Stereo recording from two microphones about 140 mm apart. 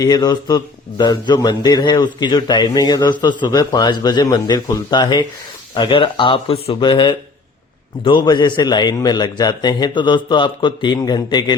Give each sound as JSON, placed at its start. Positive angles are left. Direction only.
{"t": 0.0, "sound": "a man's voice", "side_deg": 30}